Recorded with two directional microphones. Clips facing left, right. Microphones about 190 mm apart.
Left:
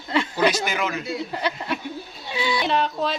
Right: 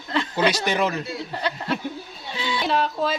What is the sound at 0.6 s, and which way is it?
Speech, 35° right (ahead or behind).